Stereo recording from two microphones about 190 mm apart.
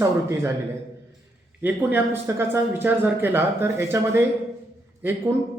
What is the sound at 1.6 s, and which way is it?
Speech, 10° right (ahead or behind).